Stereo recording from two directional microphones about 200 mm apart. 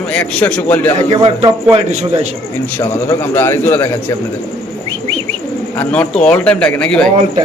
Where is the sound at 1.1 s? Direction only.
25° right (ahead or behind).